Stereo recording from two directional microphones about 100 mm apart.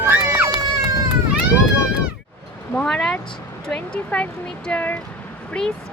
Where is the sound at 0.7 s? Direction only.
40° right (ahead or behind).